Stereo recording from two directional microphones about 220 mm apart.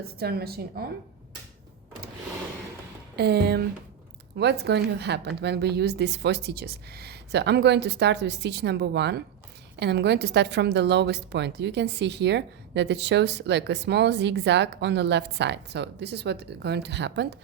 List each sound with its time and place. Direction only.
0.0 s a woman's voice: 45° right (ahead or behind)
3.2 s a woman's voice: 50° right (ahead or behind)